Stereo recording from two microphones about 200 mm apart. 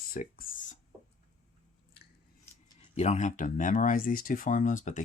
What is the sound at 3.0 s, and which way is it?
Speech, 35° left (ahead or behind).